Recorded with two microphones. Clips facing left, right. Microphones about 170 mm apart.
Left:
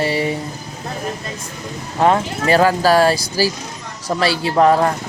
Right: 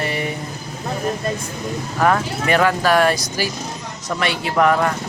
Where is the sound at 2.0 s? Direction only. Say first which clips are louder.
Left 3 dB; 25° left (ahead or behind).